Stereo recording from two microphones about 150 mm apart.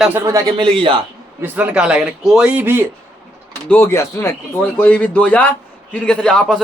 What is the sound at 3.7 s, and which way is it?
Speech, 15° left (ahead or behind).